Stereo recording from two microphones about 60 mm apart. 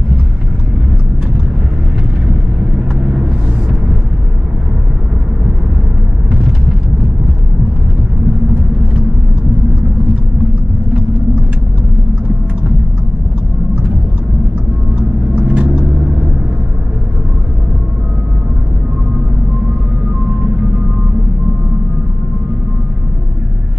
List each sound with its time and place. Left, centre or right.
15.0 s vehicle: right